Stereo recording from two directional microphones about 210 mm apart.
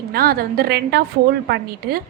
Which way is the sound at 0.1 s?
45° right (ahead or behind).